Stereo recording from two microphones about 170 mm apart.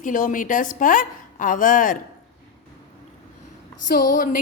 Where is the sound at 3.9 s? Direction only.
55° left (ahead or behind).